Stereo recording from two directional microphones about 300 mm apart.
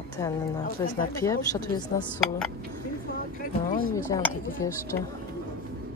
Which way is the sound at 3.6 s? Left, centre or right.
Left.